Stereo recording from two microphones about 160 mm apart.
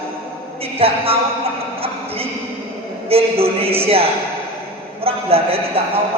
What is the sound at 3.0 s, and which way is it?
A man's voice, 35° right (ahead or behind).